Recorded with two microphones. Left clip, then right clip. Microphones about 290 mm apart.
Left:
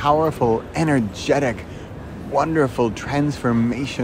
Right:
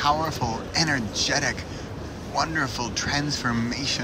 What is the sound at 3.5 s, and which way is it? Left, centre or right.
Speech, centre.